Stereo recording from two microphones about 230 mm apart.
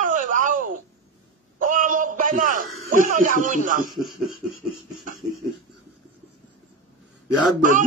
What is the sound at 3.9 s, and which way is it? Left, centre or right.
Speech, centre.